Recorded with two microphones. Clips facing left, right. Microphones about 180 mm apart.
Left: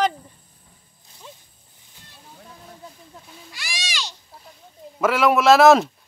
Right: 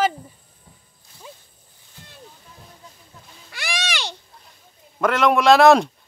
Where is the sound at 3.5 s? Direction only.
60° right (ahead or behind).